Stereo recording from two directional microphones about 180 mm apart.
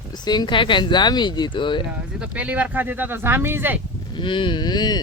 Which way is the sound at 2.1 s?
5° right (ahead or behind).